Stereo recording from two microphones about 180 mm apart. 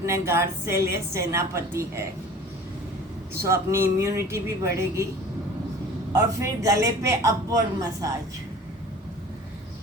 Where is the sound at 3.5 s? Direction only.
15° right (ahead or behind).